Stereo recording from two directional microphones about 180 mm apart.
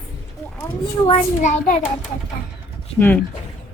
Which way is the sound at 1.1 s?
45° left (ahead or behind).